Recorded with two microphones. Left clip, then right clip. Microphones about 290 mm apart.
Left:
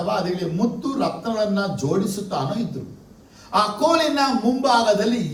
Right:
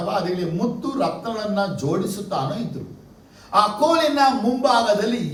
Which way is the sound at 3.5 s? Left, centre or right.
Left.